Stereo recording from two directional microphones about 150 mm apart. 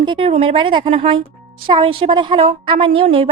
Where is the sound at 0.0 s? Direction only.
35° right (ahead or behind).